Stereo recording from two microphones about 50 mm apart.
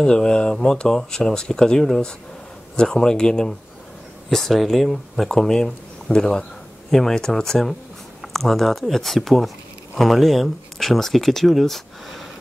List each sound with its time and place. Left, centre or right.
0.0 s speech: centre